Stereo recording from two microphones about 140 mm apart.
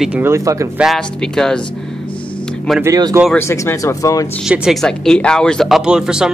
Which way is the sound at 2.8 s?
25° right (ahead or behind).